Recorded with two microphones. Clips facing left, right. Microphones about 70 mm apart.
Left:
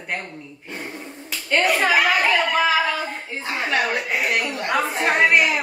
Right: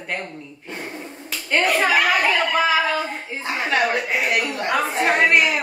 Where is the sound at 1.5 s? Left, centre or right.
Centre.